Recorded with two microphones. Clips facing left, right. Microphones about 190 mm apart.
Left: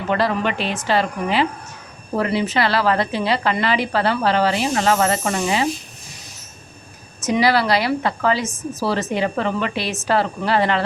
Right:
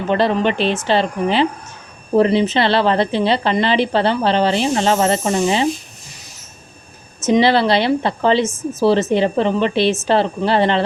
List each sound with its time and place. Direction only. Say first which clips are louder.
0.1 s a woman's voice: right 4 dB; 25° right (ahead or behind)
7.2 s a woman's voice: right 4 dB; 25° right (ahead or behind)